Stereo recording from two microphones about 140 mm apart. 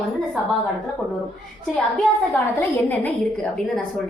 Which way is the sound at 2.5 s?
15° left (ahead or behind).